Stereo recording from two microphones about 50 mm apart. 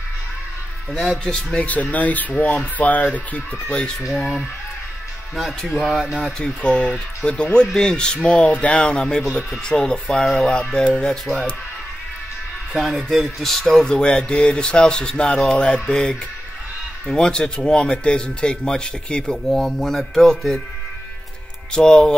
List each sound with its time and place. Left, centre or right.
1.2 s speech: centre
1.6 s speech: left
5.3 s speech: centre
6.4 s speech: left
7.6 s speech: centre
12.7 s speech: centre
13.8 s speech: centre
19.4 s speech: centre
21.7 s speech: centre